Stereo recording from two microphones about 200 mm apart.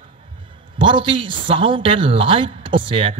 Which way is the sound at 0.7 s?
25° right (ahead or behind).